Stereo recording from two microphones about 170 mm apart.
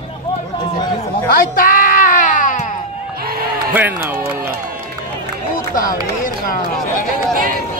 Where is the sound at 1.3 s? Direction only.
55° left (ahead or behind).